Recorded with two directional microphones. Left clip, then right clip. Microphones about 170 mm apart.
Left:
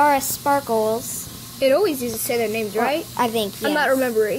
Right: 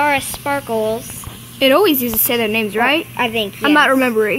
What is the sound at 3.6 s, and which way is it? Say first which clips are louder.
Speech: right 7 dB; 55° right (ahead or behind).